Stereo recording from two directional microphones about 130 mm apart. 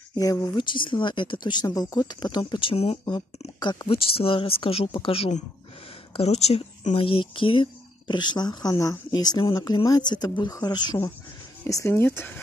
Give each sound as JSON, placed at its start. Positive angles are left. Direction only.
{"t": 0.1, "sound": "speech", "side_deg": 25}
{"t": 3.5, "sound": "speech", "side_deg": 35}
{"t": 11.6, "sound": "speech", "side_deg": 20}